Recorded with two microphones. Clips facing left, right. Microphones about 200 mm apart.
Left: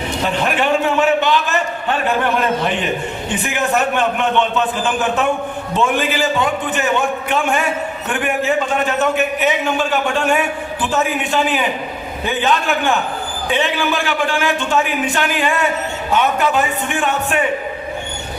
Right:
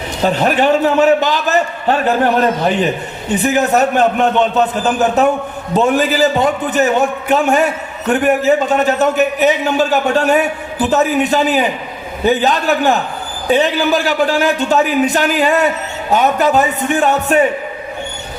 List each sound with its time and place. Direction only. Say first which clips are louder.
0.2 s a man's voice: right 6 dB; 40° right (ahead or behind)